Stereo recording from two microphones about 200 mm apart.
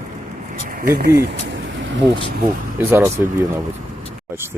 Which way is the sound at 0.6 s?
45° right (ahead or behind).